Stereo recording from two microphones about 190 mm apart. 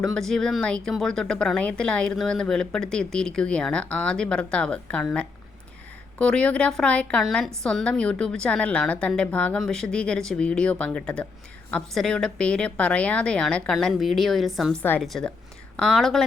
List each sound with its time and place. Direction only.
0.0 s a woman's voice: centre (ahead or behind)